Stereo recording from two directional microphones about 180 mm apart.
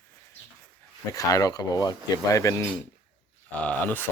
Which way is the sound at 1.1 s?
20° left (ahead or behind).